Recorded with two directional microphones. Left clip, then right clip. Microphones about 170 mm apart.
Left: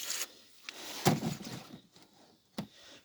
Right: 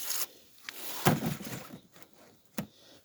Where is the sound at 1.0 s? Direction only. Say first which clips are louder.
Right 2 dB; 25° right (ahead or behind).